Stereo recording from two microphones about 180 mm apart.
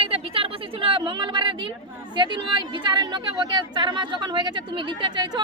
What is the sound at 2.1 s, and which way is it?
Speech, 25° right (ahead or behind).